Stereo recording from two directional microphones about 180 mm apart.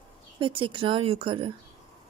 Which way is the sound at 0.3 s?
30° right (ahead or behind).